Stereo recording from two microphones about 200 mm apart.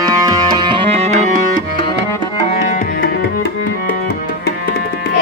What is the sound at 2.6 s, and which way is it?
Tabla, 40° left (ahead or behind).